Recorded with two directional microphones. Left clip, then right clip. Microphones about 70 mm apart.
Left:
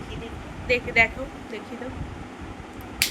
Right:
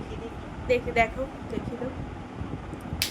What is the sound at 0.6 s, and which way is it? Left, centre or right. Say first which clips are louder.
Speech: left 3 dB; right.